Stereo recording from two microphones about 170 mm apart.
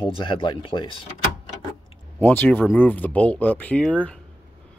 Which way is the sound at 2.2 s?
10° left (ahead or behind).